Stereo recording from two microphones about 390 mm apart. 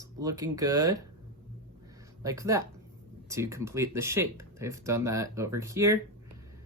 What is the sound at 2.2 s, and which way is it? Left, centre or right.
Speech, centre.